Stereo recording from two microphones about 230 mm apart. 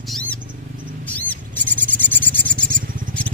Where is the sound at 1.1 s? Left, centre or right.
Centre.